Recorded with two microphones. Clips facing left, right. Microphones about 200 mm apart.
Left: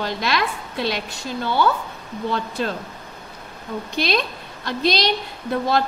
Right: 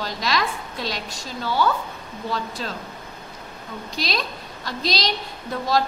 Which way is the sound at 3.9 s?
55° left (ahead or behind).